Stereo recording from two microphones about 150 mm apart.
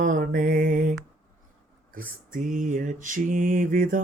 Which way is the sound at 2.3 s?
60° right (ahead or behind).